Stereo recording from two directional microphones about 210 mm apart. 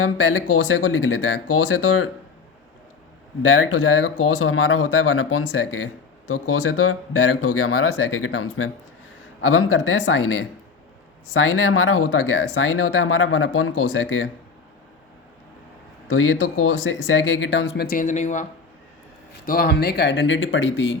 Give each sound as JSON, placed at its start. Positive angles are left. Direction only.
{"t": 0.0, "sound": "speech", "side_deg": 75}
{"t": 3.4, "sound": "speech", "side_deg": 70}
{"t": 6.5, "sound": "speech", "side_deg": 90}
{"t": 16.0, "sound": "speech", "side_deg": 80}
{"t": 17.8, "sound": "speech", "side_deg": 40}
{"t": 19.5, "sound": "speech", "side_deg": 45}